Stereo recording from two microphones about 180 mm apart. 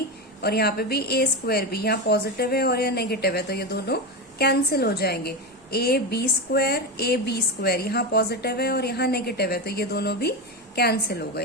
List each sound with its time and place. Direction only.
0.4 s a woman's voice: 60° left (ahead or behind)